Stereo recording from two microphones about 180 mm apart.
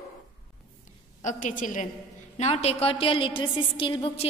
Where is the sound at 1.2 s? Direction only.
45° left (ahead or behind).